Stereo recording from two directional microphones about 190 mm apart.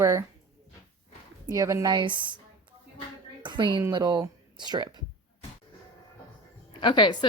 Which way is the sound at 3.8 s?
20° right (ahead or behind).